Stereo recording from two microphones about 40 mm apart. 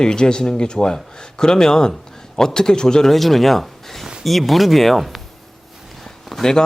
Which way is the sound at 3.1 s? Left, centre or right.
Centre.